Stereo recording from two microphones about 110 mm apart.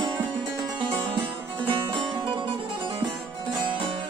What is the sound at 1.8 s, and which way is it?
Music, 45° right (ahead or behind).